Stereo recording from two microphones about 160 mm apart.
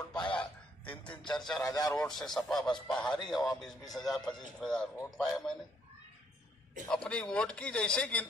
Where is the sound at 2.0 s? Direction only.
Centre (ahead or behind).